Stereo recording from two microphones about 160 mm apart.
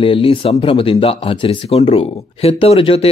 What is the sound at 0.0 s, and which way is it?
Speech, 35° left (ahead or behind).